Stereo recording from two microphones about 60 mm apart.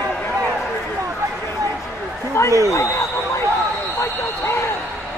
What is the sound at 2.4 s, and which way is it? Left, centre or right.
Speech, left.